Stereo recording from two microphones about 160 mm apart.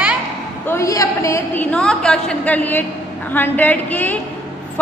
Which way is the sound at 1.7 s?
5° left (ahead or behind).